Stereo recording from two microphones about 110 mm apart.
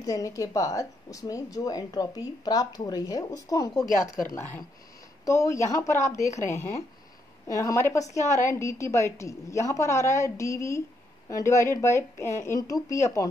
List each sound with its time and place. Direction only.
0.0 s speech: 30° left (ahead or behind)
4.4 s speech: 20° left (ahead or behind)
5.2 s a woman's voice: 30° left (ahead or behind)